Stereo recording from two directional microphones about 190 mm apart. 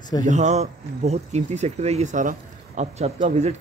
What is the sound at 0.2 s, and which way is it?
Speech, 40° right (ahead or behind).